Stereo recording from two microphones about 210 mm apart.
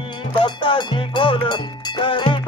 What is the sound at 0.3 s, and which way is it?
Music, 25° left (ahead or behind).